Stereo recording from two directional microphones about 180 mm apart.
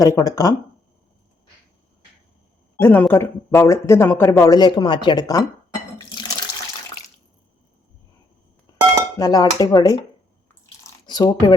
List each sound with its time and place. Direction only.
0.0 s speech: 20° left (ahead or behind)
2.7 s speech: 10° left (ahead or behind)
9.1 s speech: 20° left (ahead or behind)
11.0 s speech: 20° left (ahead or behind)